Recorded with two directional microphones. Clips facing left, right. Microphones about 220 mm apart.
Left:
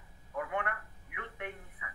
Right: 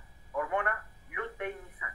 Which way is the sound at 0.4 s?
45° right (ahead or behind).